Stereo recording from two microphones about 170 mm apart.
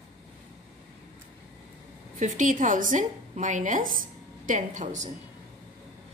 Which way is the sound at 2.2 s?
50° right (ahead or behind).